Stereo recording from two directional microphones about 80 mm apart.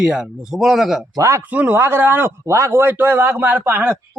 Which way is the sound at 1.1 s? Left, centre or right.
Right.